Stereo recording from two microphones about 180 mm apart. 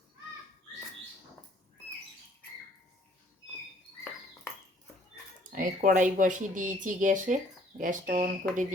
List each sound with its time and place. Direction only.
5.4 s speech: 50° right (ahead or behind)